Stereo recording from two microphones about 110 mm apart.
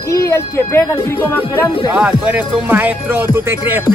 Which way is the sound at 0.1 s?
25° left (ahead or behind).